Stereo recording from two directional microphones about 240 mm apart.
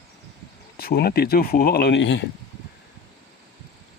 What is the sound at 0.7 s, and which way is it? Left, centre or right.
Speech, left.